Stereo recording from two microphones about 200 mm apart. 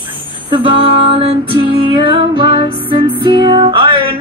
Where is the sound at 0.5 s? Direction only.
25° right (ahead or behind).